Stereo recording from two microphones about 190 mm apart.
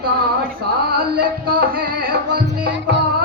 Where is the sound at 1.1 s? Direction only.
50° right (ahead or behind).